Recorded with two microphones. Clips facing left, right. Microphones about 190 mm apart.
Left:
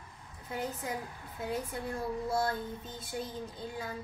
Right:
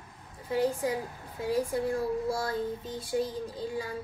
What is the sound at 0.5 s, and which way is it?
Speech, 35° right (ahead or behind).